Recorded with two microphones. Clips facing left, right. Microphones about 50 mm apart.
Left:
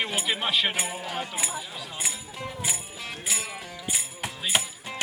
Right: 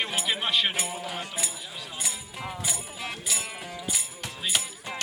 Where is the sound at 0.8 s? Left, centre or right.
Left.